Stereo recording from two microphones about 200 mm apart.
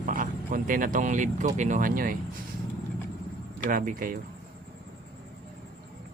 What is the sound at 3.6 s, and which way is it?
Speech, 45° right (ahead or behind).